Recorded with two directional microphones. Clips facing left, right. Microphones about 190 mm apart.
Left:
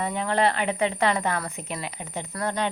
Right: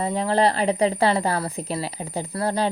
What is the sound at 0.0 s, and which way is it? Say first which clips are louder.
Speech: right 3 dB; 35° right (ahead or behind).